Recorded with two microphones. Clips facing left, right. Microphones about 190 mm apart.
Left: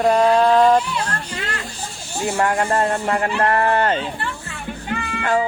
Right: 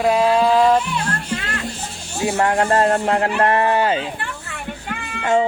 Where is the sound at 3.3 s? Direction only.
20° right (ahead or behind).